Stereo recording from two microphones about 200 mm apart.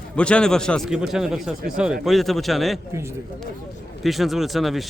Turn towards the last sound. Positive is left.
turn(degrees=0)  # may be behind; listen again after turning